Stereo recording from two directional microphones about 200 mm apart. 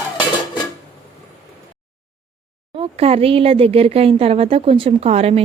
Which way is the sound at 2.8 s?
30° right (ahead or behind).